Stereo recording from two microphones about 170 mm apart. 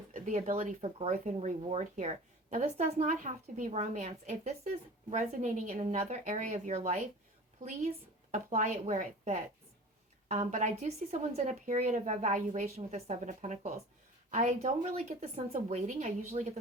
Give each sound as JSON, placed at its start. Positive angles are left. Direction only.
{"t": 0.1, "sound": "a woman's voice", "side_deg": -50}
{"t": 8.3, "sound": "a woman's voice", "side_deg": -45}
{"t": 10.5, "sound": "a woman's voice", "side_deg": -45}